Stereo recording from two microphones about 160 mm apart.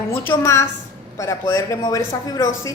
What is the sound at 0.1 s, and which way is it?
A woman's voice, 15° left (ahead or behind).